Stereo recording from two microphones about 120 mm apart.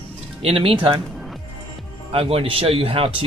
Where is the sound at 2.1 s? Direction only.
55° right (ahead or behind).